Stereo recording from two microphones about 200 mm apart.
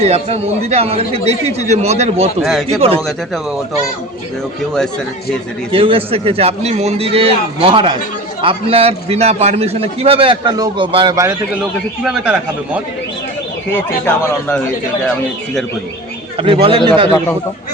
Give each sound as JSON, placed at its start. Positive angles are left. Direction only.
{"t": 0.0, "sound": "a man's voice", "side_deg": -30}
{"t": 2.4, "sound": "a man's voice", "side_deg": 0}
{"t": 2.6, "sound": "a man's voice", "side_deg": -30}
{"t": 5.7, "sound": "a man's voice", "side_deg": -25}
{"t": 13.7, "sound": "speech", "side_deg": 10}
{"t": 16.4, "sound": "a man's voice", "side_deg": -25}